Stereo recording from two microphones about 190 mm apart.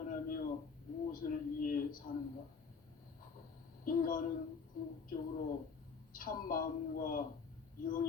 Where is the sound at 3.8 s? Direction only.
45° left (ahead or behind).